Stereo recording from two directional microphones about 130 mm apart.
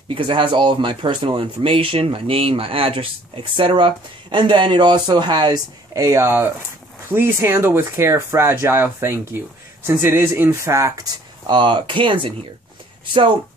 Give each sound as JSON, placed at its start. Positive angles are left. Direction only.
{"t": 0.1, "sound": "speech", "side_deg": -40}